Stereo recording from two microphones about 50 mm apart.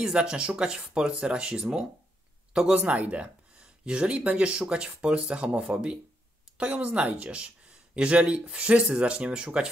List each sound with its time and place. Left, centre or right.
0.0 s speech: centre
2.8 s speech: right